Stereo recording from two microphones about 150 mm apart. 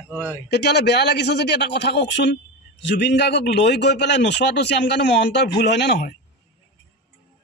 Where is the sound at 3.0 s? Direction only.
90° left.